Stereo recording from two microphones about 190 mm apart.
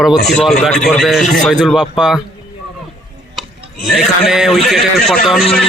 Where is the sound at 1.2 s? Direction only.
40° left (ahead or behind).